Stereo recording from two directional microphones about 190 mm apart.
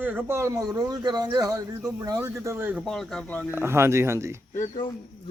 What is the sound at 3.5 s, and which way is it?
Speech, 15° right (ahead or behind).